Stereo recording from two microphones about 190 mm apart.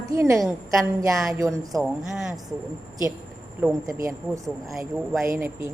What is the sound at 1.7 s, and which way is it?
Speech, centre (ahead or behind).